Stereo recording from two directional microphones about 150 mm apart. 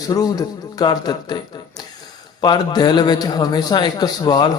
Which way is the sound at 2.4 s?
30° left (ahead or behind).